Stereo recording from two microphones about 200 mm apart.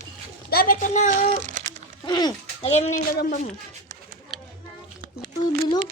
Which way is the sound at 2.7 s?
35° left (ahead or behind).